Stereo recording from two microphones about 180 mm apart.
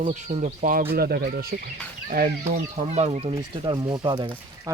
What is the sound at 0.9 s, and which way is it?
Speech, 60° right (ahead or behind).